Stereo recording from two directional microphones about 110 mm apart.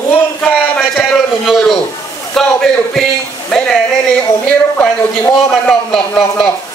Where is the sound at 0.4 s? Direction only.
15° left (ahead or behind).